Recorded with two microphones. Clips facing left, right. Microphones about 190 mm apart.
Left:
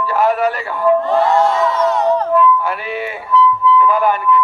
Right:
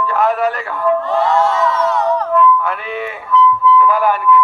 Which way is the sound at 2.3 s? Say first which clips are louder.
Even; 5° left (ahead or behind).